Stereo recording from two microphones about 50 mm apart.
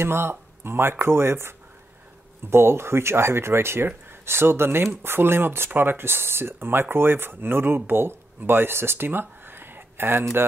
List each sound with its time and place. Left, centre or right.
0.0 s speech: right
2.5 s speech: right